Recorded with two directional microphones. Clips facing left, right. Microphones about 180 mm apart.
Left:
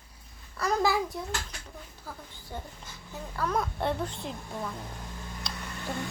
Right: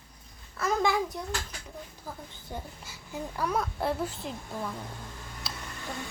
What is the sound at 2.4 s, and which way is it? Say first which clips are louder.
A woman's voice: even; 10° right (ahead or behind).